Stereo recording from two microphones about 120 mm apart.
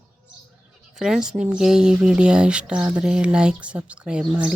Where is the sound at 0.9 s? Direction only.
5° right (ahead or behind).